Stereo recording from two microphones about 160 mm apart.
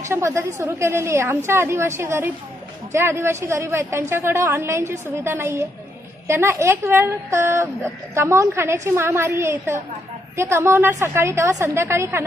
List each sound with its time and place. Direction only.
0.0 s a woman's voice: 20° right (ahead or behind)